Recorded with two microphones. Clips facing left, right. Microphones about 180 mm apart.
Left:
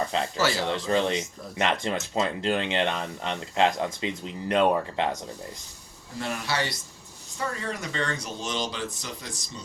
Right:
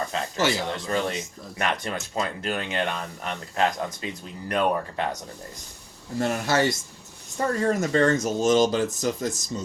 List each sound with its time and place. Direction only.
0.1 s a sound: 25° left (ahead or behind)
0.9 s speech: 25° left (ahead or behind)
6.1 s speech: 45° right (ahead or behind)